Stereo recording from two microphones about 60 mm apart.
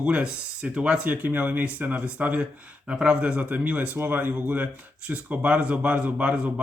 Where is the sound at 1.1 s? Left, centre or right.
Right.